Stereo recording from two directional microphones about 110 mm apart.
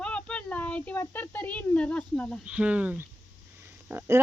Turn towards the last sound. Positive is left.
turn(degrees=-20)  # may be behind; listen again after turning